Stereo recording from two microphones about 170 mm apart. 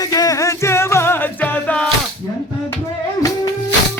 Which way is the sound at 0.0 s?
20° left (ahead or behind).